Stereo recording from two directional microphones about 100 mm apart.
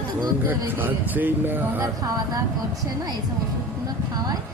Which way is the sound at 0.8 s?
20° right (ahead or behind).